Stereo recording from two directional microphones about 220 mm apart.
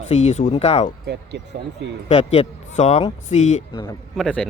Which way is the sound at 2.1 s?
25° left (ahead or behind).